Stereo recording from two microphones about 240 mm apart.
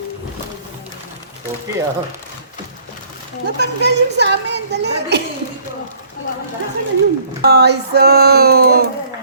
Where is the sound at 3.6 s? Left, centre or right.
Right.